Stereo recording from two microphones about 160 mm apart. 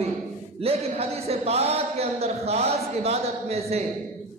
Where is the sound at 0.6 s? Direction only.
40° right (ahead or behind).